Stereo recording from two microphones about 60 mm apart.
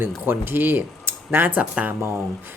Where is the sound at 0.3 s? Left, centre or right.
Right.